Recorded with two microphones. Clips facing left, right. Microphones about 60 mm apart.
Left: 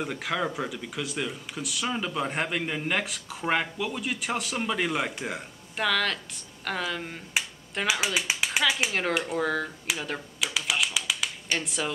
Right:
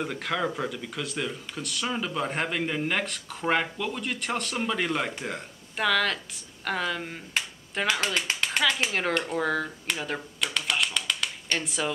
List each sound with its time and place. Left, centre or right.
0.0 s speech: centre